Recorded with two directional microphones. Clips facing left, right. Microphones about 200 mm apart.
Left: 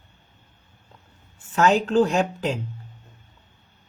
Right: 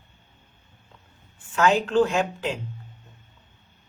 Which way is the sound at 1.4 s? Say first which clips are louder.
Left 2 dB; 35° left (ahead or behind).